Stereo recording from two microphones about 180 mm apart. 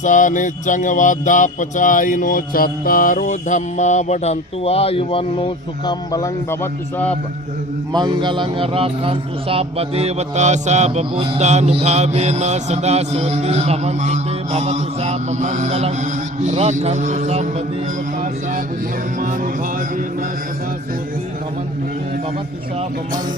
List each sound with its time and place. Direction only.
0.0 s music: 45° left (ahead or behind)
5.8 s a man's voice: 20° left (ahead or behind)
7.9 s a man's voice: 25° right (ahead or behind)